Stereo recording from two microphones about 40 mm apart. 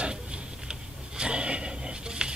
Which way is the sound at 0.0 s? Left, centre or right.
Right.